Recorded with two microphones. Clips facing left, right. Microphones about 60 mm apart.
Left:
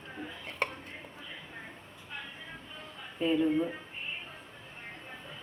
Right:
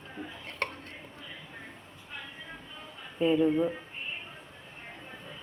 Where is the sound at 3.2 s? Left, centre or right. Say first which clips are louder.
Right 3 dB; centre.